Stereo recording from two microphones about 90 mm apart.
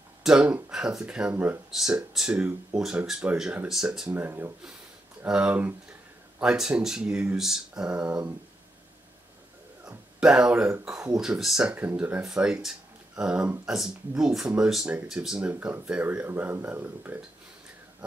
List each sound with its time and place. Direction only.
0.2 s speech: 10° right (ahead or behind)
1.3 s speech: 25° right (ahead or behind)
1.7 s speech: 5° right (ahead or behind)
4.1 s speech: 20° right (ahead or behind)
9.8 s speech: 10° right (ahead or behind)
11.7 s speech: 20° right (ahead or behind)
12.6 s a sound: 10° right (ahead or behind)
13.7 s speech: 5° right (ahead or behind)